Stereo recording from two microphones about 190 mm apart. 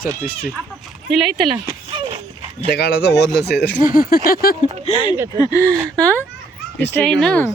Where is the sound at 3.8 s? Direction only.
45° left (ahead or behind).